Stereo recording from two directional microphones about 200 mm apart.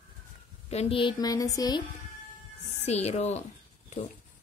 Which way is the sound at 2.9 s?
35° left (ahead or behind).